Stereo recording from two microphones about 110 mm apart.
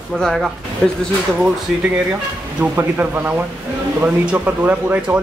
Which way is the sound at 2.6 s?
15° right (ahead or behind).